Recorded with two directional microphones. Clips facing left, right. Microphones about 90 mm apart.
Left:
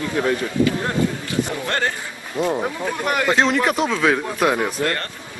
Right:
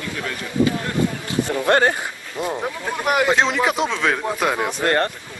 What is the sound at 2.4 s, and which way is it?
Speech, centre (ahead or behind).